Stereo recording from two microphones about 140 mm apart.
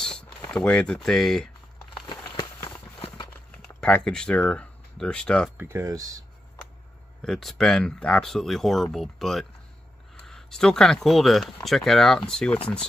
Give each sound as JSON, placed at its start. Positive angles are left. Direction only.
{"t": 0.0, "sound": "a sound", "side_deg": 5}
{"t": 0.5, "sound": "speech", "side_deg": 5}
{"t": 3.5, "sound": "speech", "side_deg": 5}
{"t": 5.6, "sound": "speech", "side_deg": -20}
{"t": 7.2, "sound": "speech", "side_deg": 0}